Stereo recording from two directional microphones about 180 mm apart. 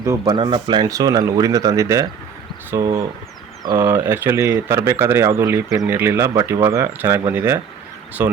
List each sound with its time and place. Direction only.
0.0 s speech: 20° right (ahead or behind)